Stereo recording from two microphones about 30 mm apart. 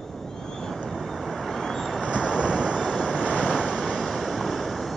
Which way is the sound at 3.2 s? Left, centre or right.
Left.